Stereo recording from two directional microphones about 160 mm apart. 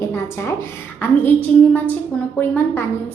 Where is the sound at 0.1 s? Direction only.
15° left (ahead or behind).